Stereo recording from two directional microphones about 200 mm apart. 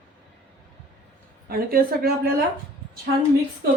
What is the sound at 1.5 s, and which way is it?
Speech, 45° right (ahead or behind).